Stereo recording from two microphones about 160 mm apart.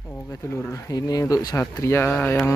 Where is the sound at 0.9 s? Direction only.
20° left (ahead or behind).